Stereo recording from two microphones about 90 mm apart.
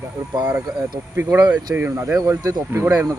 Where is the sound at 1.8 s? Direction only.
25° right (ahead or behind); by 2.6 s 45° right (ahead or behind).